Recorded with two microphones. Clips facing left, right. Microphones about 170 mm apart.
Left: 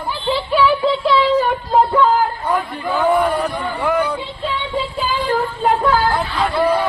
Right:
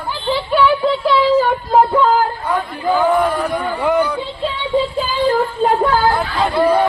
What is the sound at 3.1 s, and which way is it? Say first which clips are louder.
Speech: even; 5° left (ahead or behind).